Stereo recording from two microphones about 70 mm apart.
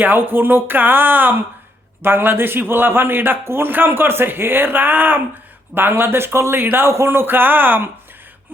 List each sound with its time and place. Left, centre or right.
0.0 s a man's voice: right